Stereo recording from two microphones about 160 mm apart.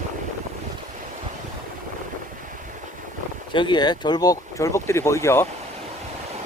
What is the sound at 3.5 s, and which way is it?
Speech, 30° left (ahead or behind).